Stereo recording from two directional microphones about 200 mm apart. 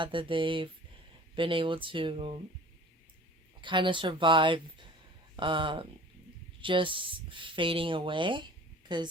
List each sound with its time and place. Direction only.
0.0 s speech: 25° right (ahead or behind)
3.6 s speech: 25° right (ahead or behind)